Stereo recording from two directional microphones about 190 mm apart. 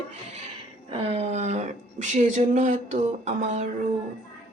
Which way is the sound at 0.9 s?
30° right (ahead or behind).